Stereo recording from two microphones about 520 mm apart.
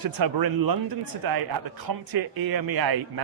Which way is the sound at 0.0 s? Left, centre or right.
Right.